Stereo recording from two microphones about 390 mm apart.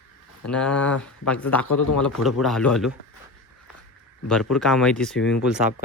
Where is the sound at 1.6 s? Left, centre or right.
Left.